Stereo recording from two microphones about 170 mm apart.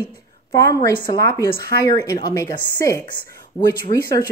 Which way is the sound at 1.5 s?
70° right (ahead or behind).